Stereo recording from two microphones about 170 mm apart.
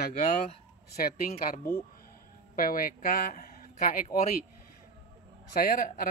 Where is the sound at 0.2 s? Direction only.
45° left (ahead or behind).